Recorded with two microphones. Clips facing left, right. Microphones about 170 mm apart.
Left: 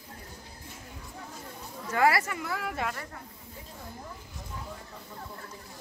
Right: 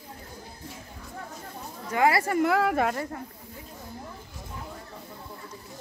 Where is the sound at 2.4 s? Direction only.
70° right (ahead or behind).